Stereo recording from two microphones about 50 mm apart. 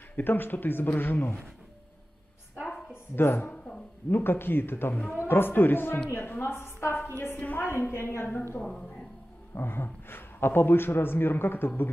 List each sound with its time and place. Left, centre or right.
0.1 s speech: left
2.7 s a sound: left
4.1 s a man's voice: left
7.1 s speech: left
7.6 s a woman's voice: left
9.6 s a man's voice: left